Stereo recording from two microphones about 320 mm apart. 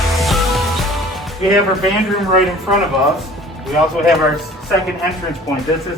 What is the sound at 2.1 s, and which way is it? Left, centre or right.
A man's voice, centre.